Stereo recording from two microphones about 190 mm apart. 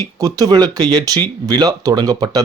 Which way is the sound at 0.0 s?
20° right (ahead or behind).